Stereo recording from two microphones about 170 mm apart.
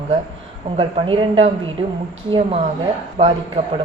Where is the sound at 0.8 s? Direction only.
30° right (ahead or behind).